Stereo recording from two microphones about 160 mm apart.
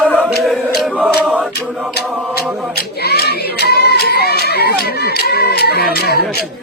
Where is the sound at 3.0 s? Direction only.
90° left.